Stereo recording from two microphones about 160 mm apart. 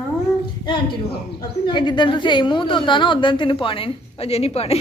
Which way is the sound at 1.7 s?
30° left (ahead or behind).